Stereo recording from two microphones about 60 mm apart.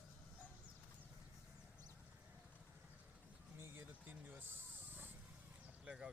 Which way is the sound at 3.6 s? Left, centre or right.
Right.